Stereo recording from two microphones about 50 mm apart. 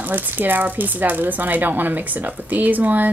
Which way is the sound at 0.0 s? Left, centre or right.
Right.